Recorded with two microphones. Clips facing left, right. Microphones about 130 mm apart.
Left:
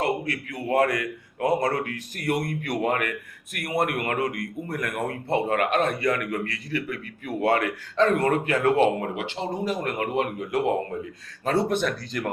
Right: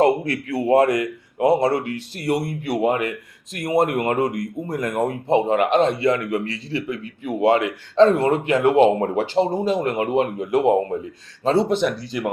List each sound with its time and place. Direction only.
0.0 s a man's voice: 35° right (ahead or behind)
11.8 s speech: 15° right (ahead or behind)